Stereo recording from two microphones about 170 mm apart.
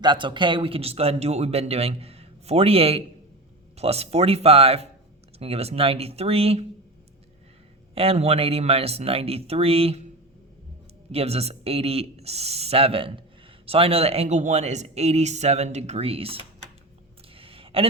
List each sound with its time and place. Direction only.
0.0 s speech: 25° right (ahead or behind)
7.9 s speech: 35° right (ahead or behind)
11.1 s speech: 35° right (ahead or behind)
17.3 s a sound: 35° right (ahead or behind)